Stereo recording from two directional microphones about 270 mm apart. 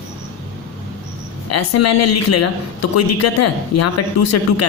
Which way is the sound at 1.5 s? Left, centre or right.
Left.